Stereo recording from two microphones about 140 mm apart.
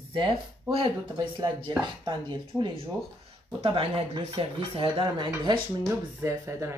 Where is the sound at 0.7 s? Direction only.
35° right (ahead or behind).